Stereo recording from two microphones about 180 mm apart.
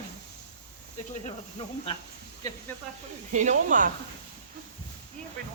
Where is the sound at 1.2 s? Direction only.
30° left (ahead or behind).